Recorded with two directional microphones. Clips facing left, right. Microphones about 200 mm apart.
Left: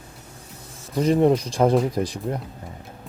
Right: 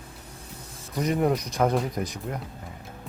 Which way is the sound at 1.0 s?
30° left (ahead or behind).